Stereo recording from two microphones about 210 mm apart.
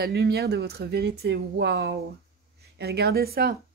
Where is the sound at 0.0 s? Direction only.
50° right (ahead or behind).